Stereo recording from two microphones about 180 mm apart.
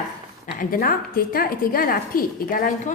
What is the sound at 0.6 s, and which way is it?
A woman's voice, 50° left (ahead or behind).